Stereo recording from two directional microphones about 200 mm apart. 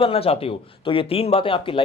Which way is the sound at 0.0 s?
30° left (ahead or behind).